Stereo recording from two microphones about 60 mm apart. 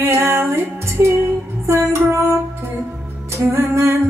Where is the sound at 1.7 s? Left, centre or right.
Right.